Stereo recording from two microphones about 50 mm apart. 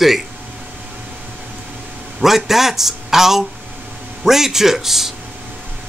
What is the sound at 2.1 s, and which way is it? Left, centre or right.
Speech, centre.